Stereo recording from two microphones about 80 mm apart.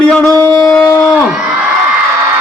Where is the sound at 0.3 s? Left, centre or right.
Left.